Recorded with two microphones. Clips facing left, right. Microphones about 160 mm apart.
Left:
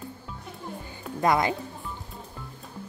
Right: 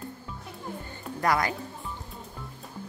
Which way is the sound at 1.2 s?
20° left (ahead or behind).